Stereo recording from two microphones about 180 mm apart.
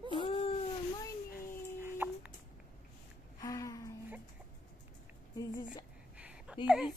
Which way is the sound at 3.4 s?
20° left (ahead or behind).